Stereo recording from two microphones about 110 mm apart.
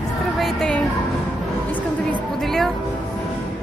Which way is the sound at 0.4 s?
5° left (ahead or behind).